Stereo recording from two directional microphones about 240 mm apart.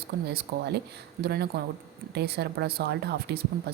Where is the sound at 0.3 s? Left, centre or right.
Right.